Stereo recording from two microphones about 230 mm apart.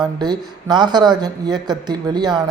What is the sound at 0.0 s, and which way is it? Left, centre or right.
Speech, centre.